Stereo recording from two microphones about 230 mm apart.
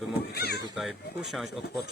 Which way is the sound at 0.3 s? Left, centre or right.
Left.